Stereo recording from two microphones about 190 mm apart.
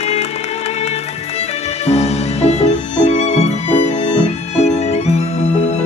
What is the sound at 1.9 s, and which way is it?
Music, 35° left (ahead or behind).